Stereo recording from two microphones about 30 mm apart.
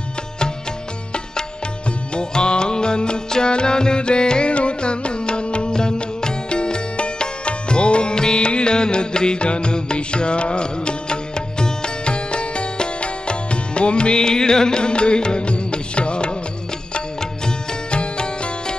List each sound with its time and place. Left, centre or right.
2.1 s music: left
12.0 s music: left
17.9 s music: left